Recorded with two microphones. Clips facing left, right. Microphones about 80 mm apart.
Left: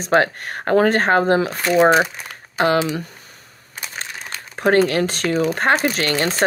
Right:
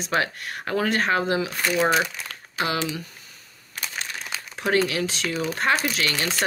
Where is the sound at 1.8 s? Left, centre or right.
Left.